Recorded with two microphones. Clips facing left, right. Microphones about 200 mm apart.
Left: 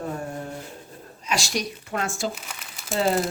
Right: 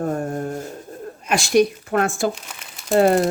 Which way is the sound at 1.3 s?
55° right (ahead or behind).